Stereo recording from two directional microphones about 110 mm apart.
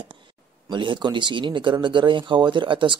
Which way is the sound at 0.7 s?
45° right (ahead or behind).